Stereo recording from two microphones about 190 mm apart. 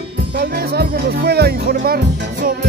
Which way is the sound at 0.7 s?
60° right (ahead or behind).